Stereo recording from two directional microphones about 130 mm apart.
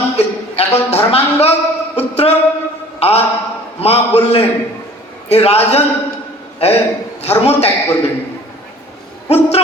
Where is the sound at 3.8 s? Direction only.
50° left (ahead or behind).